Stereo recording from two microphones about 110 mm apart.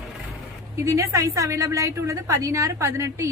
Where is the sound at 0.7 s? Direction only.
30° right (ahead or behind).